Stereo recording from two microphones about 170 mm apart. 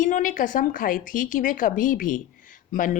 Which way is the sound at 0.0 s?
50° left (ahead or behind).